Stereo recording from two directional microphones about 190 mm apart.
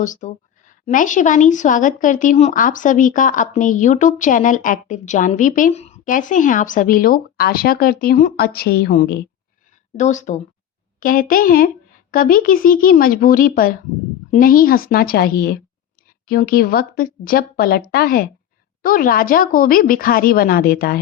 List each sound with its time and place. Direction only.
0.0 s a woman's voice: 40° left (ahead or behind)
10.0 s a woman's voice: 40° left (ahead or behind)